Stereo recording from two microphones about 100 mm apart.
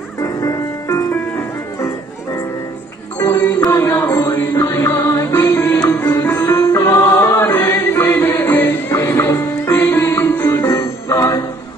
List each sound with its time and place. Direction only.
0.2 s music: 35° left (ahead or behind)
3.2 s music: 25° left (ahead or behind)